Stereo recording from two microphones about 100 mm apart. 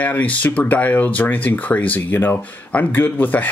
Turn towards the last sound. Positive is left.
turn(degrees=15)  # may be behind; listen again after turning